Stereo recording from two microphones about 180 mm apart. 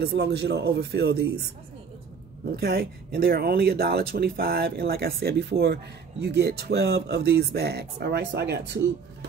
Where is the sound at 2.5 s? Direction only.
60° right (ahead or behind).